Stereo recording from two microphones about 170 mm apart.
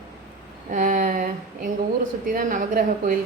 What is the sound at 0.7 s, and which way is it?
A woman's voice, 55° right (ahead or behind).